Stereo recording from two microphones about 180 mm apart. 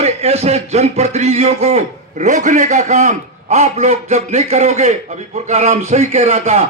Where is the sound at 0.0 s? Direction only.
35° right (ahead or behind).